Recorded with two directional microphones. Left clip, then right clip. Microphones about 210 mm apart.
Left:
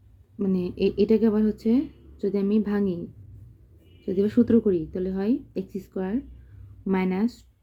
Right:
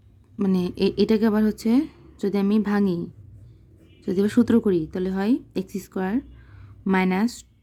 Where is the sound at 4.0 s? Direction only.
30° right (ahead or behind).